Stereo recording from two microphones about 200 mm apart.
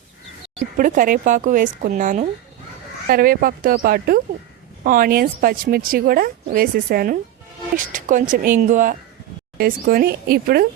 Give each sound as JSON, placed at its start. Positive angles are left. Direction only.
{"t": 0.6, "sound": "speech", "side_deg": -45}